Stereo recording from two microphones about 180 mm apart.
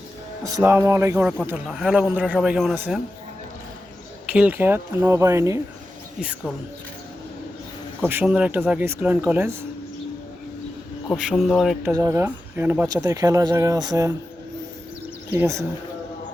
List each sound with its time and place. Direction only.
0.4 s speech: 15° right (ahead or behind)
4.3 s speech: 10° right (ahead or behind)
6.1 s speech: 5° right (ahead or behind)
8.0 s speech: 10° right (ahead or behind)
11.2 s speech: centre (ahead or behind)
11.9 s speech: 15° right (ahead or behind)
15.3 s speech: 15° right (ahead or behind)